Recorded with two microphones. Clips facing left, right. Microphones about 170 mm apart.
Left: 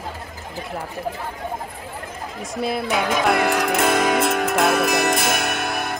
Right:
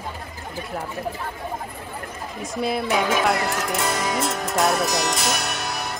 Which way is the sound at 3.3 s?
65° left (ahead or behind).